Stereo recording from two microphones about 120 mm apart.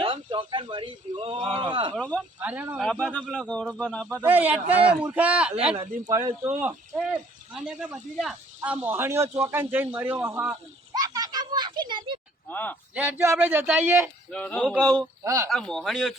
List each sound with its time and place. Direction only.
0.0 s speech: 45° right (ahead or behind)
2.1 s speech: 10° right (ahead or behind)
2.8 s a man's voice: 5° left (ahead or behind)
4.2 s speech: 15° right (ahead or behind)
6.1 s speech: 25° right (ahead or behind)
10.5 s a sound: 30° right (ahead or behind)
12.5 s a man's voice: 15° left (ahead or behind)
12.9 s speech: 15° right (ahead or behind)
14.3 s a man's voice: 10° left (ahead or behind)
14.6 s speech: centre (ahead or behind)
15.2 s speech: 25° right (ahead or behind)
15.4 s speech: 5° left (ahead or behind)